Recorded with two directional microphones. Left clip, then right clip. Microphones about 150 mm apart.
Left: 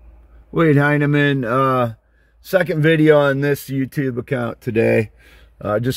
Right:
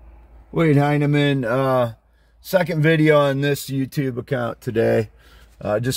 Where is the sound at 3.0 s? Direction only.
10° left (ahead or behind).